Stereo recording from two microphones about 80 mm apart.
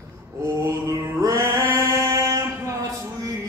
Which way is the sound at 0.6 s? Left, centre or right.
Right.